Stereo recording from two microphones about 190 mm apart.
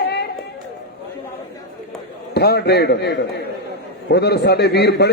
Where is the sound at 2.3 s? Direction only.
60° left (ahead or behind).